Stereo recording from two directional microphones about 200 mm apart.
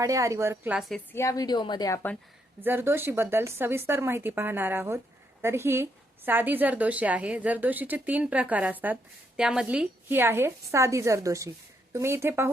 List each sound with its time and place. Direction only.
0.0 s a woman's voice: 15° right (ahead or behind); by 1.0 s centre (ahead or behind)
1.1 s a woman's voice: 15° left (ahead or behind)
2.6 s a woman's voice: 10° right (ahead or behind)